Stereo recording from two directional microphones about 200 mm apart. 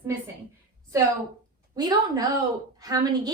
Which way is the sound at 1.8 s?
20° right (ahead or behind).